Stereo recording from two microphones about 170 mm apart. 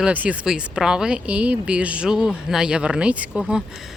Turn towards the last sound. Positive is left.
turn(degrees=-5)  # may be behind; listen again after turning